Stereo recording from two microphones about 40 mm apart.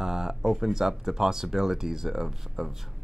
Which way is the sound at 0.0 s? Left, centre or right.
Centre.